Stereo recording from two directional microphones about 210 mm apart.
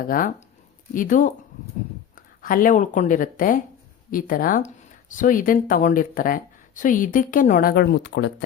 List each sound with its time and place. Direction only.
0.0 s speech: 40° left (ahead or behind)